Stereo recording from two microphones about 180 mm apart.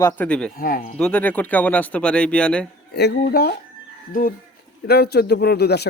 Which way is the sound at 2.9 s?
65° left (ahead or behind).